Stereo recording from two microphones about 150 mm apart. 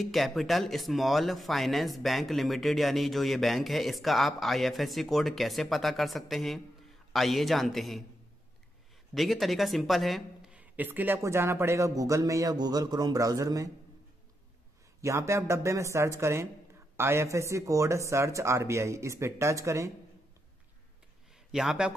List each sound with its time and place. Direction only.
0.0 s speech: centre (ahead or behind)
9.1 s speech: centre (ahead or behind); by 13.7 s 25° right (ahead or behind)
15.0 s speech: 20° right (ahead or behind)
21.5 s speech: 5° right (ahead or behind)